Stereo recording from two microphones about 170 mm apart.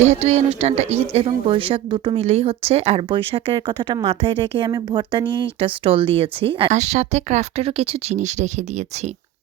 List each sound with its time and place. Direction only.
0.2 s a woman's voice: 35° right (ahead or behind)